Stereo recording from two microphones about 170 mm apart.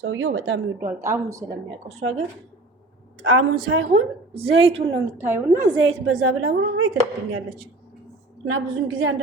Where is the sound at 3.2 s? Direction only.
90° right.